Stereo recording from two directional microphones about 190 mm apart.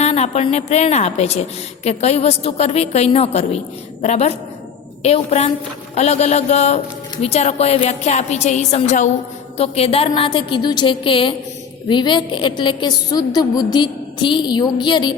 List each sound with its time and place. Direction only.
0.0 s a woman's voice: 35° left (ahead or behind)